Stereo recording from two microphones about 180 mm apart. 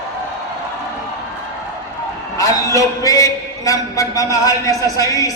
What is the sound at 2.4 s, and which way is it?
A man's voice, 20° left (ahead or behind).